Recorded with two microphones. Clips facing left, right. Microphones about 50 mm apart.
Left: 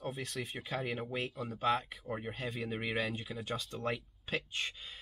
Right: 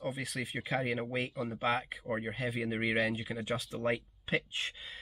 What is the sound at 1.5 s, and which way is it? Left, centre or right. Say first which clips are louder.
Speech: left 1 dB; right.